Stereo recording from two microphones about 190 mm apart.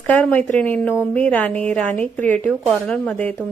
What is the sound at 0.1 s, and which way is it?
A woman's voice, 10° left (ahead or behind).